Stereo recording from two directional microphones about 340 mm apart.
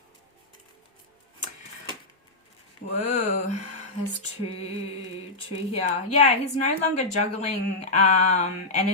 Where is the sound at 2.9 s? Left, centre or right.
Left.